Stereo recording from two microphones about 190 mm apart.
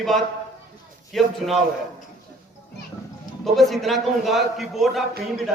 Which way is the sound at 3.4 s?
Centre (ahead or behind).